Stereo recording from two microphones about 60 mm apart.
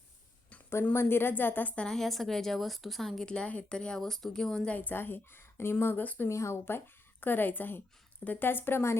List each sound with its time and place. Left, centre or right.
0.9 s a woman's voice: left
1.9 s a woman's voice: centre
3.2 s speech: centre
4.7 s a woman's voice: left
6.2 s speech: left
6.7 s a woman's voice: left